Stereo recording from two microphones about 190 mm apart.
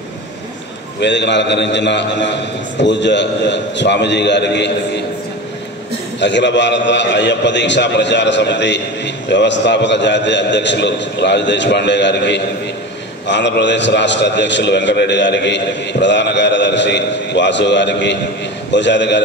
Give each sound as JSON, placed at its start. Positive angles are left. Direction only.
{"t": 1.0, "sound": "a man's voice", "side_deg": 65}
{"t": 6.1, "sound": "a man's voice", "side_deg": 70}